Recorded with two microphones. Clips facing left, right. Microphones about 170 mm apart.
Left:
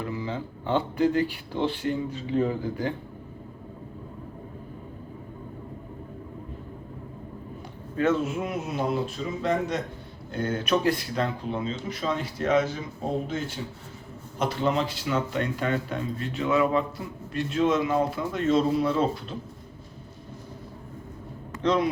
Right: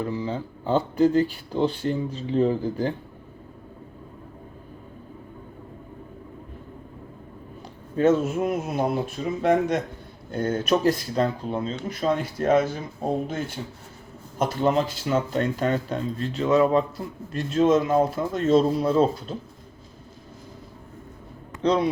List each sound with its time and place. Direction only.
0.1 s speech: 40° right (ahead or behind)
7.9 s a man's voice: 45° right (ahead or behind)
10.3 s speech: 45° right (ahead or behind)
14.3 s speech: 45° right (ahead or behind)
21.6 s speech: 35° right (ahead or behind)